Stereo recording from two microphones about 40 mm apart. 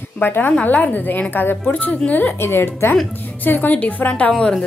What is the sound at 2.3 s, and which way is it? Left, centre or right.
Speech, left.